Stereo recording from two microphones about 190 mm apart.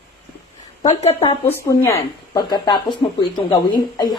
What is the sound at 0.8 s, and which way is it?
Speech, 35° left (ahead or behind).